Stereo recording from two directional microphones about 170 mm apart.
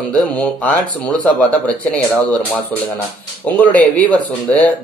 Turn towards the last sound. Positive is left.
turn(degrees=10)  # may be behind; listen again after turning